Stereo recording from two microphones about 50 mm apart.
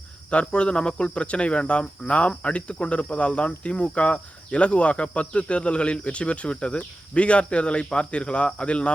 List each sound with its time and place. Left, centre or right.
0.3 s speech: left